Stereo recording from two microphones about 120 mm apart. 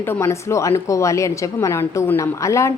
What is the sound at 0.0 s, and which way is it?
A woman's voice, 20° left (ahead or behind).